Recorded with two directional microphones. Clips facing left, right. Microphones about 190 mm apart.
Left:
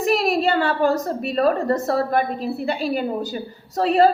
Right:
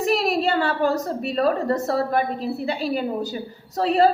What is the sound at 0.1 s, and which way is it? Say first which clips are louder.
A woman's voice: left 3 dB; 55° left (ahead or behind).